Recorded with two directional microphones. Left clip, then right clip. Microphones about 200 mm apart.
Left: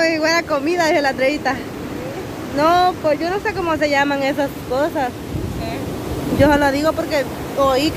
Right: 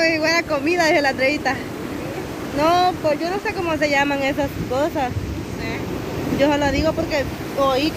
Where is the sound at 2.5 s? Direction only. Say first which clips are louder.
Left 2 dB; 15° left (ahead or behind); by 5.1 s centre (ahead or behind).